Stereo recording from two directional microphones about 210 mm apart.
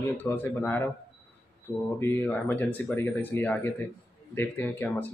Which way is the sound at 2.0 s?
10° left (ahead or behind).